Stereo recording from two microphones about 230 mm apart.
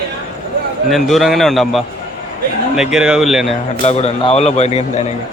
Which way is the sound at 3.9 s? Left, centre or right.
Left.